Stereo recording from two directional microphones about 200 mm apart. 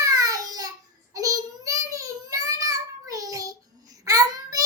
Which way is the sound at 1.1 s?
15° right (ahead or behind).